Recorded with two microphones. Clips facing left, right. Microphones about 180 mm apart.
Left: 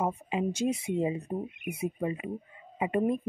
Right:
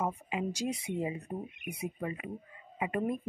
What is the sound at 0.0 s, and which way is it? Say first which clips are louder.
Speech: left 4 dB; 25° left (ahead or behind).